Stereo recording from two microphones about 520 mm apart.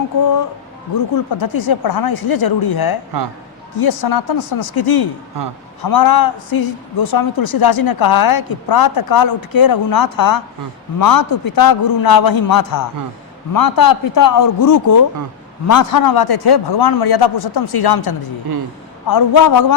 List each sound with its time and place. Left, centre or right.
0.9 s a man's voice: left